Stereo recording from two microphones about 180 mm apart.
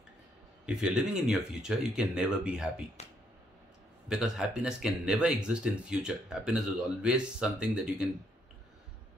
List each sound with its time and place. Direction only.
0.7 s speech: 5° right (ahead or behind)
3.0 s speech: 35° left (ahead or behind)
4.1 s speech: 5° right (ahead or behind)